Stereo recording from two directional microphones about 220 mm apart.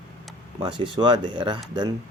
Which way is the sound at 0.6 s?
25° right (ahead or behind).